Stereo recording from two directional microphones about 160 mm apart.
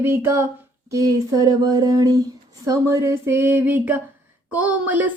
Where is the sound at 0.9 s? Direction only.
20° right (ahead or behind).